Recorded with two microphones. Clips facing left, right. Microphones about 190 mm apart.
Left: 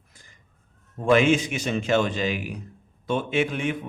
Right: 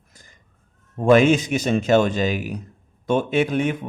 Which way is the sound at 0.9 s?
40° right (ahead or behind).